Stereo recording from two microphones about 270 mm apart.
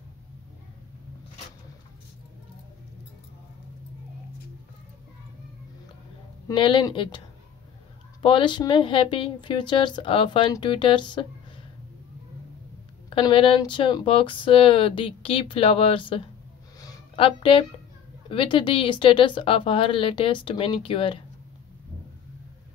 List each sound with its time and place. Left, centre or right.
6.4 s a woman's voice: centre
8.2 s a woman's voice: centre
13.1 s speech: centre
16.8 s a sound: centre
18.3 s speech: centre